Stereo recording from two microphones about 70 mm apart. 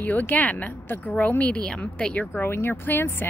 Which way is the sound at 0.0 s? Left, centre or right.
Left.